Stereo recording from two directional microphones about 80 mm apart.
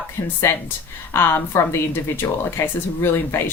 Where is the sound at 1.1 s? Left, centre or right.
Left.